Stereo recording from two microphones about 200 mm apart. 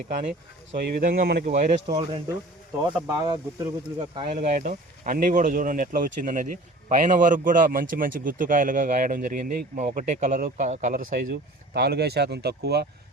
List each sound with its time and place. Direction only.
0.1 s speech: 35° right (ahead or behind)
0.8 s speech: 45° right (ahead or behind)
1.5 s speech: 35° right (ahead or behind)
1.9 s speech: 20° right (ahead or behind)
4.1 s speech: 30° right (ahead or behind); by 12.9 s 55° right (ahead or behind)